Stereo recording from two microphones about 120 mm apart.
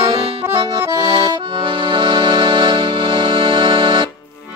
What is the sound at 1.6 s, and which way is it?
Music, 45° right (ahead or behind).